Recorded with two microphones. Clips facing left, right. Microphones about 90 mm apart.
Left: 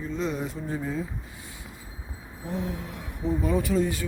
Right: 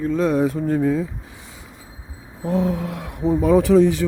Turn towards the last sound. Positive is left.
turn(degrees=-85)